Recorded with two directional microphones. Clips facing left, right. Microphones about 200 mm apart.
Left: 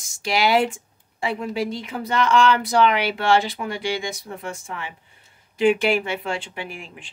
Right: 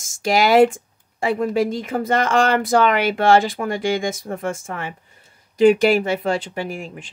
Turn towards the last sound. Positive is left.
turn(degrees=-45)  # may be behind; listen again after turning